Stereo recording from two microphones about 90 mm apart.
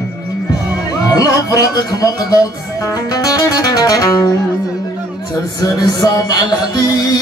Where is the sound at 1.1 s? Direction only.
40° left (ahead or behind).